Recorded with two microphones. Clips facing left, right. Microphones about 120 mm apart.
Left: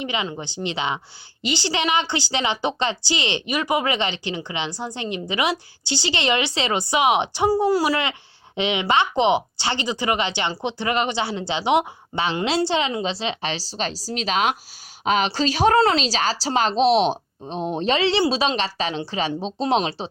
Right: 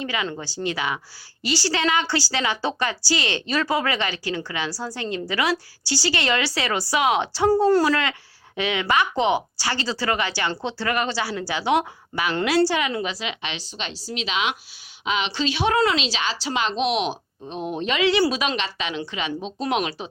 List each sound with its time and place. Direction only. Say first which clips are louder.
0.0 s a woman's voice: left 1 dB; 20° left (ahead or behind)